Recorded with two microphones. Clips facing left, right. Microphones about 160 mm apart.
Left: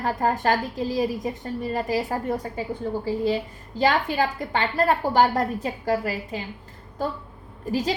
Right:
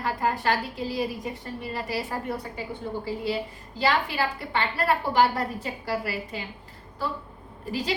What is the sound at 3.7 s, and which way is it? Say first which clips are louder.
A woman's voice: left 4 dB; 45° left (ahead or behind).